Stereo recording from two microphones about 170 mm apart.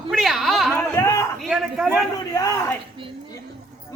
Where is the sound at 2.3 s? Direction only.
20° left (ahead or behind).